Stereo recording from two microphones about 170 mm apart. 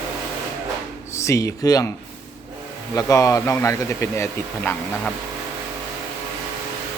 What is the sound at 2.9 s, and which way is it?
Speech, 20° left (ahead or behind).